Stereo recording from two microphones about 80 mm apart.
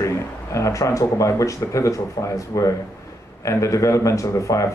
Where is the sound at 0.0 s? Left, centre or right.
Left.